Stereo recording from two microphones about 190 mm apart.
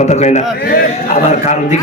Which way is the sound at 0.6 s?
50° left (ahead or behind).